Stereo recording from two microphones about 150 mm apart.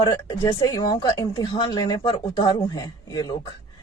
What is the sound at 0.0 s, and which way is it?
Speech, 30° left (ahead or behind).